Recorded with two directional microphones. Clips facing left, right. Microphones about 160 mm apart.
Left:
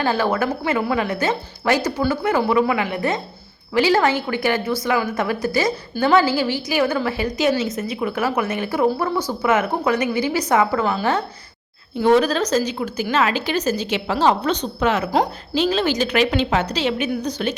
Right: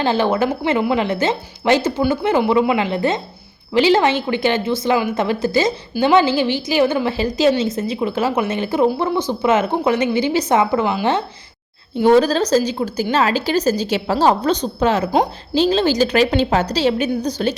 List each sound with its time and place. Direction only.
0.0 s a woman's voice: 25° right (ahead or behind)
11.9 s a woman's voice: 30° right (ahead or behind)